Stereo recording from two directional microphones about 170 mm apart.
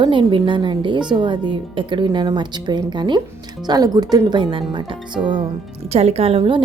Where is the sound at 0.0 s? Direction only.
30° right (ahead or behind).